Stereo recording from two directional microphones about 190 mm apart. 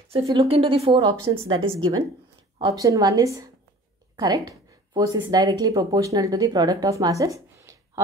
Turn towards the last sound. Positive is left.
turn(degrees=-15)  # may be behind; listen again after turning